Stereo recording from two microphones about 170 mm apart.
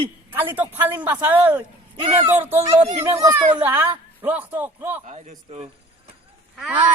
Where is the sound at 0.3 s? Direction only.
10° right (ahead or behind).